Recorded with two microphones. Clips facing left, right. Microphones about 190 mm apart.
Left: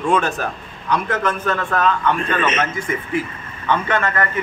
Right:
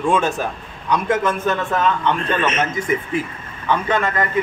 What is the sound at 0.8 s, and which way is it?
A man's voice, 20° right (ahead or behind).